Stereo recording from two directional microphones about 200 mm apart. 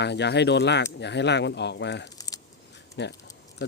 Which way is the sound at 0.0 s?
60° left (ahead or behind).